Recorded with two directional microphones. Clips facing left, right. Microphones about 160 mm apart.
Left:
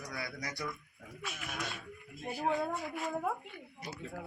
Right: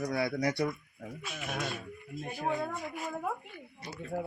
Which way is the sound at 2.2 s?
10° left (ahead or behind).